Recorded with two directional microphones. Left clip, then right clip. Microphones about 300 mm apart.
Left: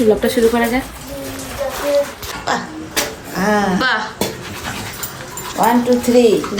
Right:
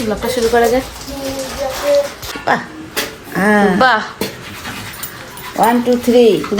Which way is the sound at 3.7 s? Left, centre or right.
Centre.